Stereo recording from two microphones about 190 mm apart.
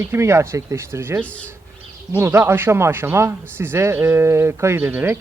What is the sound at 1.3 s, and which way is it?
Speech, 5° left (ahead or behind).